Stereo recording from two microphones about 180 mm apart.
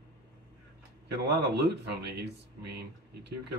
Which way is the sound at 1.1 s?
70° right (ahead or behind).